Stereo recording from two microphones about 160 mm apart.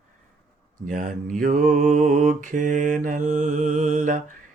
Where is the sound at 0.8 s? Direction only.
60° right (ahead or behind).